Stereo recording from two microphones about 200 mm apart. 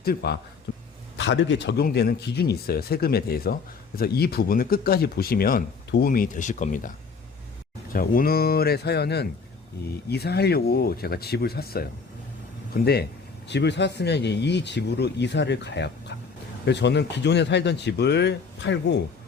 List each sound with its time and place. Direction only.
0.0 s speech: 50° left (ahead or behind)
1.2 s speech: 65° left (ahead or behind); by 6.9 s 40° left (ahead or behind)
7.9 s speech: 45° left (ahead or behind); by 19.0 s 60° left (ahead or behind)